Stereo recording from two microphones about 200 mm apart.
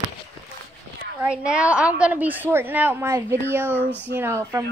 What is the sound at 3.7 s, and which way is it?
Speech, 10° left (ahead or behind).